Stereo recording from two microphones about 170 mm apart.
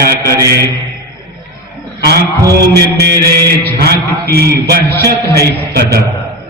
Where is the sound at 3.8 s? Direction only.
70° right (ahead or behind).